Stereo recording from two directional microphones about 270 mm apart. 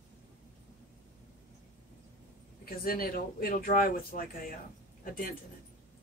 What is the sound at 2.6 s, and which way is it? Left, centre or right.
Speech, left.